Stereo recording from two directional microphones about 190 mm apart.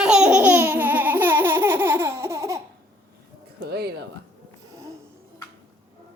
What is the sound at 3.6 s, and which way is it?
Music, 55° right (ahead or behind).